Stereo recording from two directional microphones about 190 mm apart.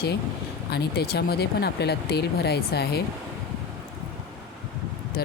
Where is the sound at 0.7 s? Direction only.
60° left (ahead or behind).